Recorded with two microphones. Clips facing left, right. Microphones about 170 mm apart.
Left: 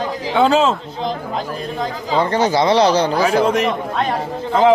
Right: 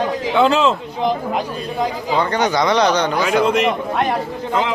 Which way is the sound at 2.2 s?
30° left (ahead or behind).